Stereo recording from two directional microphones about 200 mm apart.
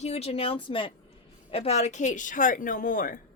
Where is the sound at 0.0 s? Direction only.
30° left (ahead or behind).